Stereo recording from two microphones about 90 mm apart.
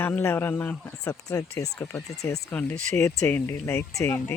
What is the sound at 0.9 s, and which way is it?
Speech, 40° left (ahead or behind).